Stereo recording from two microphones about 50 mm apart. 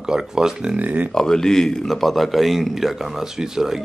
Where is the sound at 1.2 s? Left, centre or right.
Centre.